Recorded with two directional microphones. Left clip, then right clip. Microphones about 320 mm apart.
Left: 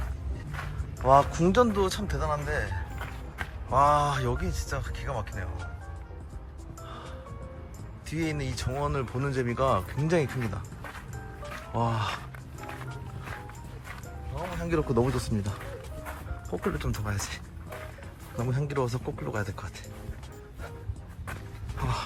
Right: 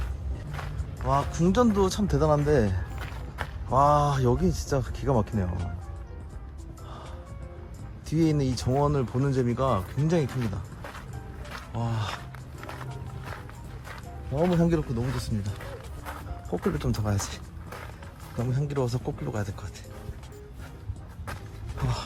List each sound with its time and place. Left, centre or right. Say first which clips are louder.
0.5 s speech: even; centre
2.6 s music: right 2 dB; centre
3.7 s speech: right 1 dB; centre
8.1 s speech: right 6 dB; centre
11.4 s filing: left 6 dB; centre
12.6 s music: even; centre
14.4 s speech: right 4 dB; centre
21.8 s dog: left 2 dB; centre